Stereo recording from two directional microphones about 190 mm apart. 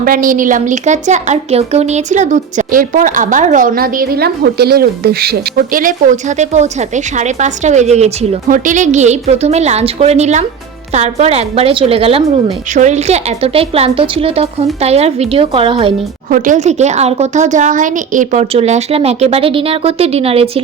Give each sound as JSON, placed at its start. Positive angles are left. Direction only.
{"t": 0.0, "sound": "a woman's voice", "side_deg": -45}
{"t": 16.3, "sound": "a woman's voice", "side_deg": -45}